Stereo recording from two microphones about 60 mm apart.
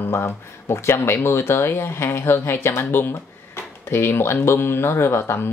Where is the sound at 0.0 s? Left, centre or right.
Left.